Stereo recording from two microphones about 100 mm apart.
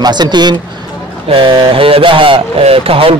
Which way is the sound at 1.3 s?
60° right (ahead or behind).